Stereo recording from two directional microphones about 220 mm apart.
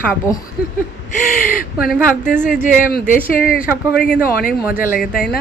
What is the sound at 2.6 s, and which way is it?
Speech, 40° left (ahead or behind).